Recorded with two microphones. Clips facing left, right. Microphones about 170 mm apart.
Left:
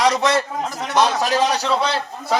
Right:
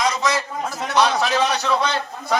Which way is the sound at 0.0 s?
65° left (ahead or behind).